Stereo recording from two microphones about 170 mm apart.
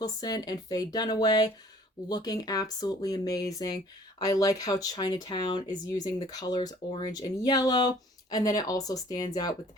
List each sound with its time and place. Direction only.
0.0 s speech: 20° left (ahead or behind)